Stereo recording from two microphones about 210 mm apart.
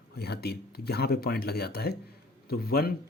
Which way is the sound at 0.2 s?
50° left (ahead or behind).